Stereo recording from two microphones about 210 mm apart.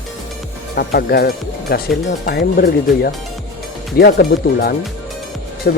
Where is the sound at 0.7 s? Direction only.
50° left (ahead or behind).